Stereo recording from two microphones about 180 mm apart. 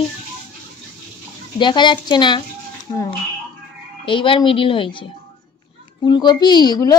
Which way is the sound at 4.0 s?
30° left (ahead or behind).